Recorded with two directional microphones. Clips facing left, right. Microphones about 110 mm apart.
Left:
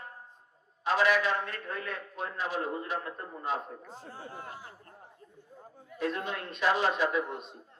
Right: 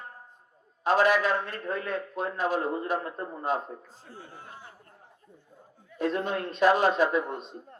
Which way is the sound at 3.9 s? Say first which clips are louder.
Left 2 dB; 45° left (ahead or behind).